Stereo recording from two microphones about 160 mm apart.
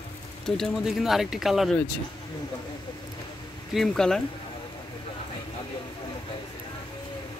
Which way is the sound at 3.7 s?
5° left (ahead or behind).